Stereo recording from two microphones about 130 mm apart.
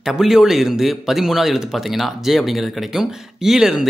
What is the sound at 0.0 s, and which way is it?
Speech, 5° right (ahead or behind).